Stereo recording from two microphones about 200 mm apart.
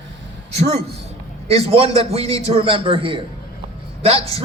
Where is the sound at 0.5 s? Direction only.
30° right (ahead or behind).